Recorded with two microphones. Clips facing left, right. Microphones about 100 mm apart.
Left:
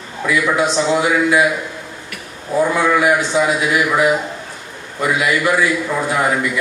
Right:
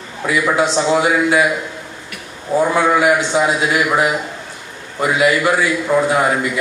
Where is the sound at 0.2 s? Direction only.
25° right (ahead or behind).